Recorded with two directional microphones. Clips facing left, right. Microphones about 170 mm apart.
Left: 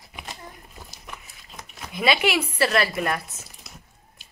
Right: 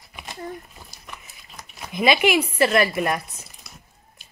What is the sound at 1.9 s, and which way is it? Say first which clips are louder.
Speech: right 3 dB; 20° right (ahead or behind).